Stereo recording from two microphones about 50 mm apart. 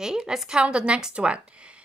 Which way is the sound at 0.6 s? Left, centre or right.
Right.